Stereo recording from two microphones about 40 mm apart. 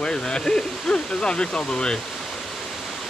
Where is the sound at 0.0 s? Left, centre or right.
Left.